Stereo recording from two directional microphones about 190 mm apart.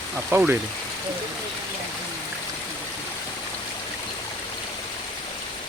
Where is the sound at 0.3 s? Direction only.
10° right (ahead or behind).